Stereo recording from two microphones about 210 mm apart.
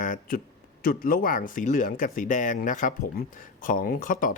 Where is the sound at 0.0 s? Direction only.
40° left (ahead or behind).